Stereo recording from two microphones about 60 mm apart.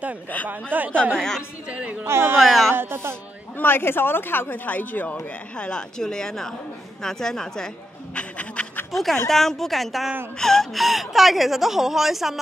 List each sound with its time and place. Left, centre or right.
0.5 s speech: right
1.1 s speech: centre
1.7 s speech: right
2.0 s speech: right
2.3 s speech: centre
2.7 s speech: right
3.5 s speech: left
5.6 s speech: centre
8.9 s speech: centre